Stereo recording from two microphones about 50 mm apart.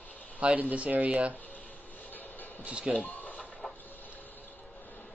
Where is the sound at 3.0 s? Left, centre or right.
Left.